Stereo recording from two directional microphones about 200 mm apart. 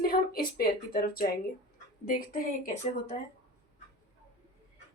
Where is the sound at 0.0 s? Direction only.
50° left (ahead or behind).